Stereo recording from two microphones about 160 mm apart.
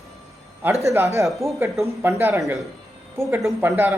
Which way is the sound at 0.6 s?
20° right (ahead or behind).